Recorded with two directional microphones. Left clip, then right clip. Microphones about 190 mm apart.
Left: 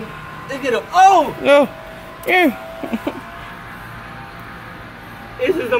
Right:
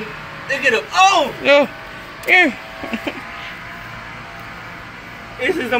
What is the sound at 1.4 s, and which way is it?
Speech, 15° left (ahead or behind).